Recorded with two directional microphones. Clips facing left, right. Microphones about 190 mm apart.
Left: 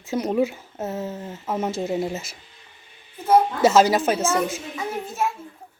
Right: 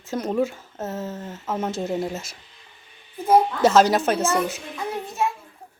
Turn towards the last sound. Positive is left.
turn(degrees=0)  # may be behind; listen again after turning